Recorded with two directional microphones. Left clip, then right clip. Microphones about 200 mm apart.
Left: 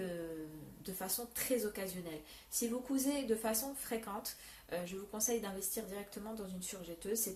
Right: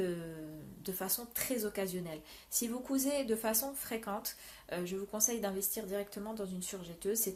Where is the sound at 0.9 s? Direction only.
50° right (ahead or behind).